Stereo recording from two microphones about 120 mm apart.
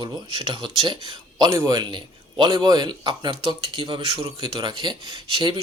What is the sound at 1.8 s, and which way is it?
Speech, 40° right (ahead or behind).